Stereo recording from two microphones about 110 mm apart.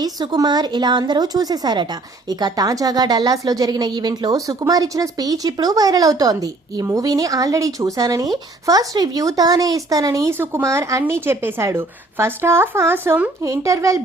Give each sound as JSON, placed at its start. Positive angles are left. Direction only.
{"t": 0.0, "sound": "a woman's voice", "side_deg": -35}
{"t": 13.4, "sound": "a woman's voice", "side_deg": -30}